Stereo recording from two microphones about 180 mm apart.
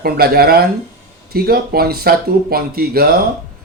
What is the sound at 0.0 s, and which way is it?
Speech, 60° right (ahead or behind).